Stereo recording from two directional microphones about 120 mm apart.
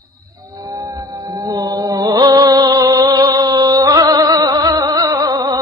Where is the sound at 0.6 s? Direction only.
30° right (ahead or behind).